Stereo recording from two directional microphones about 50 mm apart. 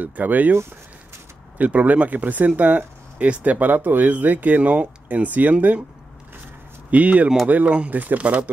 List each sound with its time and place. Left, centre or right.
0.0 s speech: right
1.6 s speech: right
6.9 s speech: right